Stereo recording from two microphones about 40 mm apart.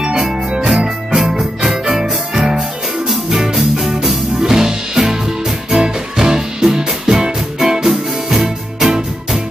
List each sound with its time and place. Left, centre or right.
0.0 s music: centre